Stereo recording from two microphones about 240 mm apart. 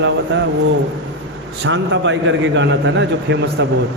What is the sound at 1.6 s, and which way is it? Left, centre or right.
A man's voice, right.